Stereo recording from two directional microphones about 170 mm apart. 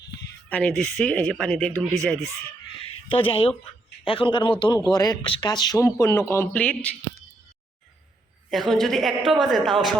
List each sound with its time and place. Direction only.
0.5 s speech: 5° left (ahead or behind)
3.1 s speech: 30° left (ahead or behind); by 6.9 s 10° left (ahead or behind)
8.4 s speech: centre (ahead or behind)